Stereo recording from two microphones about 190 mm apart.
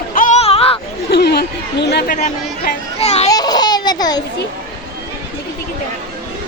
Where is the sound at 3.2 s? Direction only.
20° left (ahead or behind).